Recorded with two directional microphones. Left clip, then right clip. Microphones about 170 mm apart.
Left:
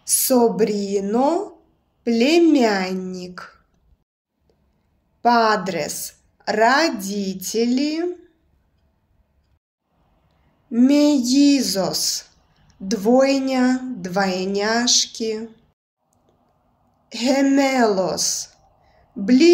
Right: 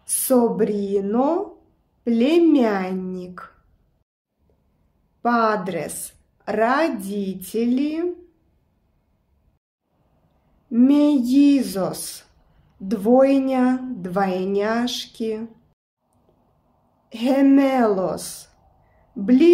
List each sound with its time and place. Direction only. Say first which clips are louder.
0.0 s a woman's voice: left 2 dB; 20° right (ahead or behind)
5.2 s a woman's voice: left 3 dB; 15° right (ahead or behind)
10.7 s a woman's voice: left 1 dB; 20° right (ahead or behind)
17.1 s a woman's voice: right 1 dB; 20° right (ahead or behind)